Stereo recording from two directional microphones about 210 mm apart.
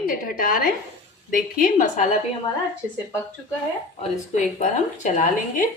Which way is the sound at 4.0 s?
35° left (ahead or behind).